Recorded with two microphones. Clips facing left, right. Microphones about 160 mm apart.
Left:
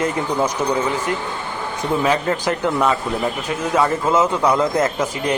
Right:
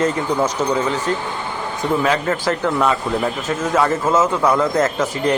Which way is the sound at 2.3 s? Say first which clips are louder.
Right 1 dB; 15° left (ahead or behind).